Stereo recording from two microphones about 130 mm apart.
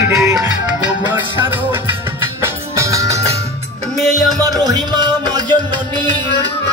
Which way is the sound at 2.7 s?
25° right (ahead or behind).